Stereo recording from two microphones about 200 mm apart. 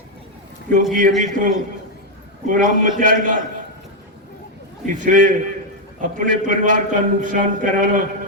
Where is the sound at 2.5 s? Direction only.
40° right (ahead or behind).